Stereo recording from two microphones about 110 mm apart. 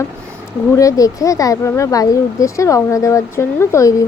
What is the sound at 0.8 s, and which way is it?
Speech, 30° left (ahead or behind).